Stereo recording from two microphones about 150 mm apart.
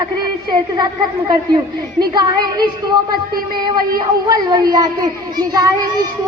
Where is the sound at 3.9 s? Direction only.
25° right (ahead or behind).